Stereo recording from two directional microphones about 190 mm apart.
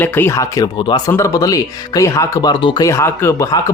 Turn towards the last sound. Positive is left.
turn(degrees=15)  # may be behind; listen again after turning